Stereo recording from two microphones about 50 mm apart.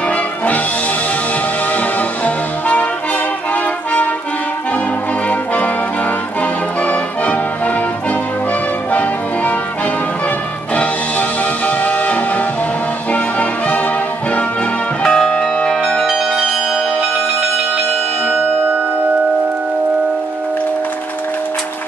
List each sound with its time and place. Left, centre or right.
2.0 s music: left
5.3 s brass instrument: left
6.8 s music: left
10.7 s music: left
15.0 s music: centre